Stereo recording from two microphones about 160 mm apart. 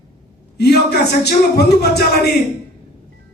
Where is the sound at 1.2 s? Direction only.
90° left.